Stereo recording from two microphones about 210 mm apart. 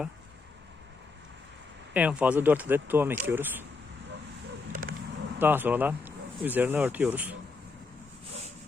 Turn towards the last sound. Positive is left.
turn(degrees=-5)  # may be behind; listen again after turning